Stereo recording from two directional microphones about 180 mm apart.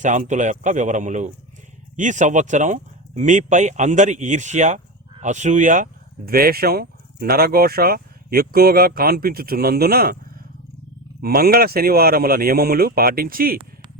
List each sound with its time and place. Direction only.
0.0 s a man's voice: 45° right (ahead or behind)
11.2 s speech: 60° right (ahead or behind)